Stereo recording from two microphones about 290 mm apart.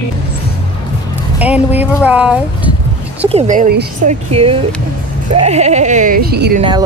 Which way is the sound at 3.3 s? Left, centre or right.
Right.